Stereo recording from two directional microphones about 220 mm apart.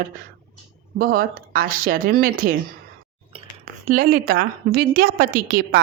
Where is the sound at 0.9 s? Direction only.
40° right (ahead or behind).